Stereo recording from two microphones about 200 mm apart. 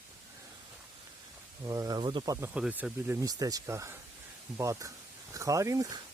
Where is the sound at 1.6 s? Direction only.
20° right (ahead or behind).